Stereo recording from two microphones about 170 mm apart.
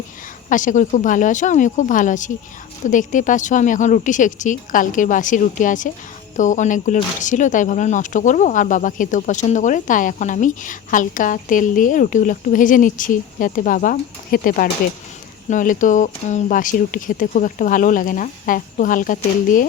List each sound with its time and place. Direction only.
0.5 s speech: 50° left (ahead or behind)